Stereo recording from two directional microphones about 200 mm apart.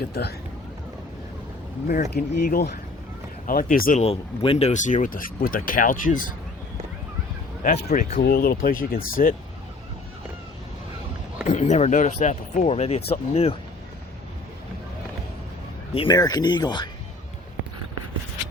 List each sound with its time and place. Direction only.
0.1 s speech: 55° left (ahead or behind)
1.9 s speech: 45° left (ahead or behind)
4.0 s speech: 30° left (ahead or behind)
7.6 s speech: 40° left (ahead or behind)
11.4 s speech: 35° left (ahead or behind)
16.0 s speech: 20° left (ahead or behind)